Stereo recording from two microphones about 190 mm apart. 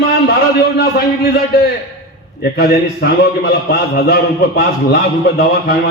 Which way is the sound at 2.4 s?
55° left (ahead or behind).